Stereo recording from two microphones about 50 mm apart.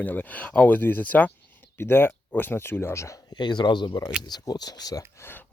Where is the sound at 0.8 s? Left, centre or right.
Left.